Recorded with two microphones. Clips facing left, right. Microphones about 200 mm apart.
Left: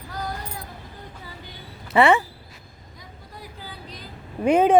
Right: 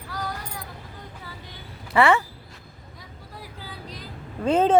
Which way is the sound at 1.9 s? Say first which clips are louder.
Left 2 dB; 20° left (ahead or behind).